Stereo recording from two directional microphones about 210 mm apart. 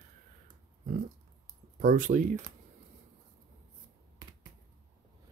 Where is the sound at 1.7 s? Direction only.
40° right (ahead or behind).